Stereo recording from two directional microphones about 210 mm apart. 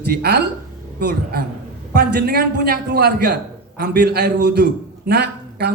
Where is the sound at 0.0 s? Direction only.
50° right (ahead or behind).